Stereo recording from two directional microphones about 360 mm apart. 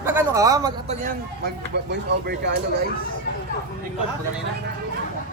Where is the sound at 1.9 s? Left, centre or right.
Right.